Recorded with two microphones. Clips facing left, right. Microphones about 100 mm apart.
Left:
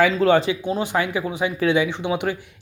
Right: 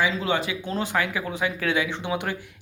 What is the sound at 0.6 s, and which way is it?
Speech, 15° left (ahead or behind).